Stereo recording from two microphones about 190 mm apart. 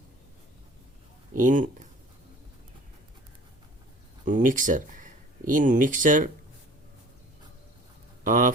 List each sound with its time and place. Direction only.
1.4 s speech: 45° right (ahead or behind)
4.3 s speech: 45° right (ahead or behind)
8.2 s speech: 45° right (ahead or behind)